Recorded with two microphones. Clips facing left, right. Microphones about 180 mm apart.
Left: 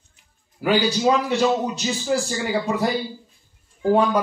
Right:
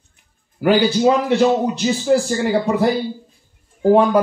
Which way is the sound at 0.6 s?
60° right (ahead or behind).